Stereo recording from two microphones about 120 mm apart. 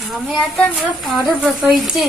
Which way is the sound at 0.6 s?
Centre (ahead or behind).